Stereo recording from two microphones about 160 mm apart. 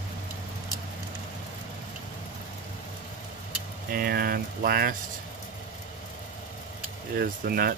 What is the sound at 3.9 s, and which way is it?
Speech, 70° right (ahead or behind).